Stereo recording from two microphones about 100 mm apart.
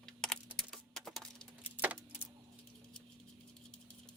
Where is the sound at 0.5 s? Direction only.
5° left (ahead or behind).